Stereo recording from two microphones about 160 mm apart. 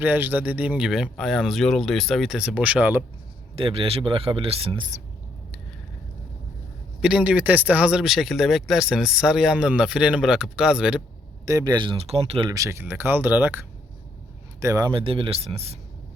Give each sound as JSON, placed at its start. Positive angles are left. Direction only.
{"t": 0.0, "sound": "speech", "side_deg": -10}
{"t": 3.5, "sound": "speech", "side_deg": -35}
{"t": 7.0, "sound": "speech", "side_deg": -5}
{"t": 11.4, "sound": "speech", "side_deg": -25}
{"t": 12.5, "sound": "speech", "side_deg": -20}
{"t": 14.9, "sound": "speech", "side_deg": -35}